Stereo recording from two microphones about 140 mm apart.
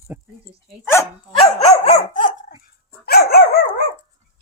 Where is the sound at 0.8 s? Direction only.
15° left (ahead or behind).